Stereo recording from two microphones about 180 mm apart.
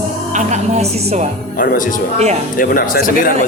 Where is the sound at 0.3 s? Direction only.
40° right (ahead or behind).